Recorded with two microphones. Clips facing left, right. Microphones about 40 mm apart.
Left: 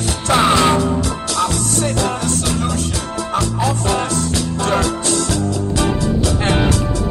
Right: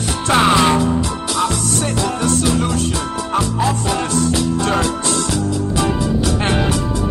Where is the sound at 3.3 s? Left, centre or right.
Right.